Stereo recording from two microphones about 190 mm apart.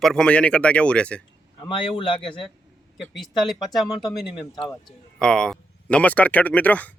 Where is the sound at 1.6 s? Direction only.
25° left (ahead or behind).